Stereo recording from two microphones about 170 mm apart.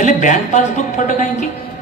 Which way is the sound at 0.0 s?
45° left (ahead or behind).